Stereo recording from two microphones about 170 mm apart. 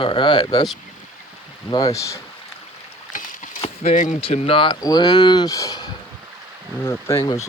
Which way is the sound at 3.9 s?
50° left (ahead or behind).